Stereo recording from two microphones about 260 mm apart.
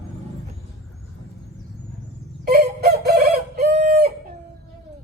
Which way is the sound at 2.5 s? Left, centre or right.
Right.